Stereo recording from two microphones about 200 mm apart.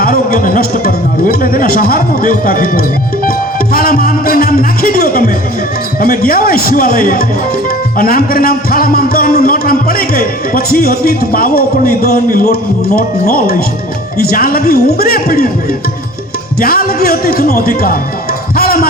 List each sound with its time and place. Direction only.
0.0 s a man's voice: 45° left (ahead or behind)
16.6 s a man's voice: 50° left (ahead or behind)
18.5 s a sound: 50° left (ahead or behind)